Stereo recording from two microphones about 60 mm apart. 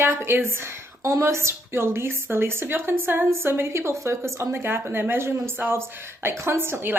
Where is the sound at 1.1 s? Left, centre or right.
Right.